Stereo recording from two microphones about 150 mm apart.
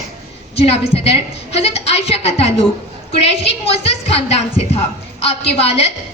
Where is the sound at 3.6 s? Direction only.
40° left (ahead or behind).